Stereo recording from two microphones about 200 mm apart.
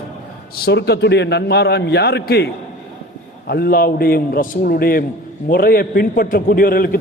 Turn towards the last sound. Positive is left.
turn(degrees=50)  # may be behind; listen again after turning